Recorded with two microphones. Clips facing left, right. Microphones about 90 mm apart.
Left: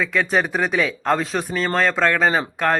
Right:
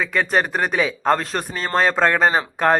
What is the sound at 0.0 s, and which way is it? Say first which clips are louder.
A man's voice: even; 5° right (ahead or behind).